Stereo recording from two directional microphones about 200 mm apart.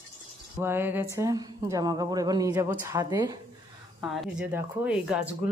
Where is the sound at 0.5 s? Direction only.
10° right (ahead or behind).